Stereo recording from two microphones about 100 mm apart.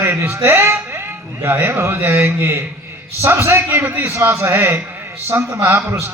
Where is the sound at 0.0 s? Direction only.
25° right (ahead or behind).